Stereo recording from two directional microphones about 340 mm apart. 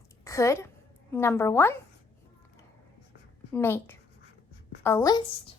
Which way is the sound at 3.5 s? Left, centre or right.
Centre.